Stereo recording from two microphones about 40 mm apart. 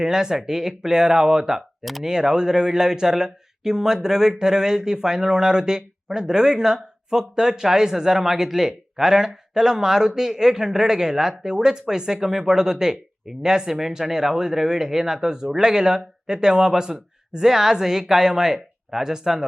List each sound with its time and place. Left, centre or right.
0.0 s speech: centre
1.8 s speech: centre
2.0 s speech: centre